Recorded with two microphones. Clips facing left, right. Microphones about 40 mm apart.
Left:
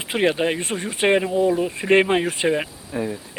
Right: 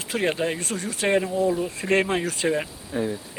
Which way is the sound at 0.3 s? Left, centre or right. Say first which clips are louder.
Left 4 dB; left.